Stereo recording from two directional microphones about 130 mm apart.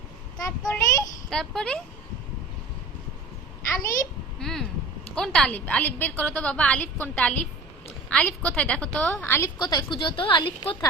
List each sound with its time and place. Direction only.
0.4 s child singing: 25° left (ahead or behind)
1.3 s speech: 5° left (ahead or behind)
4.4 s a sound: 5° left (ahead or behind)
5.1 s a woman's voice: 5° left (ahead or behind)
9.6 s speech: 30° left (ahead or behind)